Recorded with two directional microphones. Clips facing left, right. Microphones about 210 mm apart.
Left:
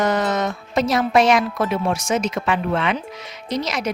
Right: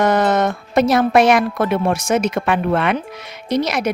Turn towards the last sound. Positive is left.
turn(degrees=-60)  # may be behind; listen again after turning